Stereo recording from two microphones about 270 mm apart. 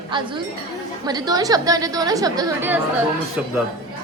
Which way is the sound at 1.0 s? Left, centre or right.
Centre.